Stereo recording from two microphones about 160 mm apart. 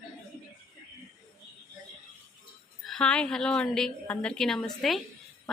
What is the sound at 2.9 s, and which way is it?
A woman's voice, 5° left (ahead or behind).